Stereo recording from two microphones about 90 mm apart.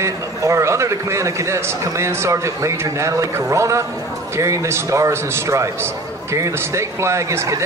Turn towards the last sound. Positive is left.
turn(degrees=-35)  # may be behind; listen again after turning